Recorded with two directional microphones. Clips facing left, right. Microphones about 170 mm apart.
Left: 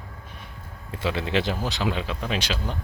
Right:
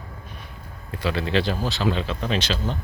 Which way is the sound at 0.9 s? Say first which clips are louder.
Right 2 dB; 20° left (ahead or behind).